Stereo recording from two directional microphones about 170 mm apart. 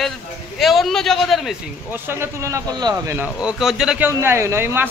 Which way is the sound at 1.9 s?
15° right (ahead or behind).